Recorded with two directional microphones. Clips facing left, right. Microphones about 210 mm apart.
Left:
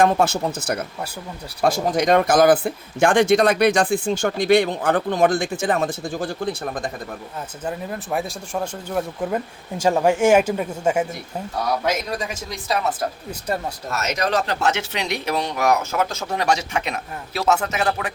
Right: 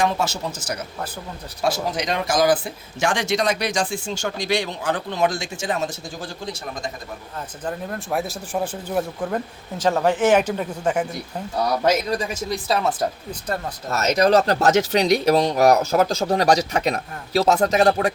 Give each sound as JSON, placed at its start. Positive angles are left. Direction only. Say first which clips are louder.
{"t": 0.0, "sound": "speech", "louder": "left 5 dB", "side_deg": 55}
{"t": 7.6, "sound": "speech", "louder": "even", "side_deg": 5}
{"t": 9.3, "sound": "speech", "louder": "left 1 dB", "side_deg": 10}
{"t": 12.6, "sound": "speech", "louder": "even", "side_deg": -25}